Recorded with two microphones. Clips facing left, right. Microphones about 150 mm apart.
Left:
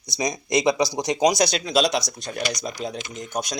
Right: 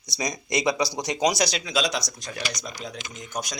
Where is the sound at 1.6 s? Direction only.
60° left (ahead or behind).